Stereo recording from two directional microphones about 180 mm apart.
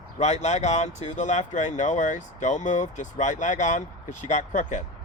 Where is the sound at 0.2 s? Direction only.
40° left (ahead or behind).